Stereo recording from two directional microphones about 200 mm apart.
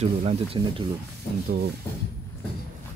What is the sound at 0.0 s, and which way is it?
Speech, 30° right (ahead or behind).